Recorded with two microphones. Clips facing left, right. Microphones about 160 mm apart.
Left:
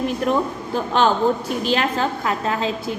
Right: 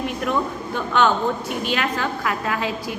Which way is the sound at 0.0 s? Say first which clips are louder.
Left 3 dB; 35° left (ahead or behind).